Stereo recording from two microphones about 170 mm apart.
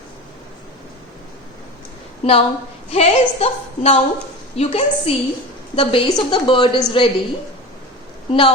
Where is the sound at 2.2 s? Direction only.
35° left (ahead or behind).